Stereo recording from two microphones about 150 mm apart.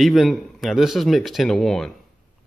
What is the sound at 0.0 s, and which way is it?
Speech, centre (ahead or behind).